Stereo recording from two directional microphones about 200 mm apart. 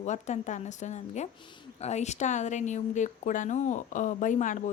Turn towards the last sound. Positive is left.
turn(degrees=40)  # may be behind; listen again after turning